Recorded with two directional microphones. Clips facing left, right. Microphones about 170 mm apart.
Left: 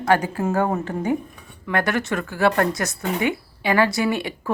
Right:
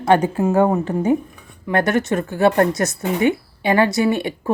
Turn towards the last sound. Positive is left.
turn(degrees=-25)  # may be behind; listen again after turning